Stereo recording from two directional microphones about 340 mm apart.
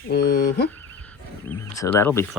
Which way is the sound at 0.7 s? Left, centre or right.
Centre.